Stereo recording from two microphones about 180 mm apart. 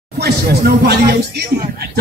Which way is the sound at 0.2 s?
60° right (ahead or behind).